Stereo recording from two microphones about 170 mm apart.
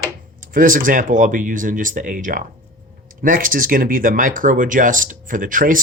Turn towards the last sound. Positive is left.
turn(degrees=-50)  # may be behind; listen again after turning